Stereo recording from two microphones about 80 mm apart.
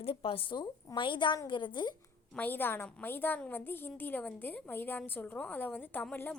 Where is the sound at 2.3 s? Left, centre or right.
Left.